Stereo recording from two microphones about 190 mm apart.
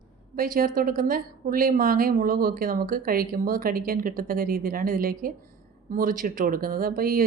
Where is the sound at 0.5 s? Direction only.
50° right (ahead or behind).